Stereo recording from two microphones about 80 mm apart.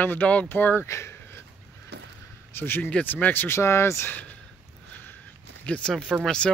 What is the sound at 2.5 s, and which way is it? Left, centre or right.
Speech, left.